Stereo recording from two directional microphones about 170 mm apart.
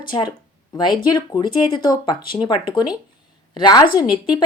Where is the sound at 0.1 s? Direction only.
25° left (ahead or behind).